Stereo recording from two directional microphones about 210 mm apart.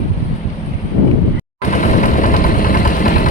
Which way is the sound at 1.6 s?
40° left (ahead or behind).